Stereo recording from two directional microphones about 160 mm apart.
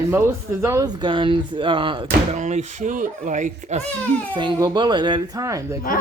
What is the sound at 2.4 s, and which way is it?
Speech, 45° right (ahead or behind).